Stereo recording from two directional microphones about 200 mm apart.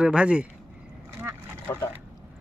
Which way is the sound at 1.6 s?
15° left (ahead or behind).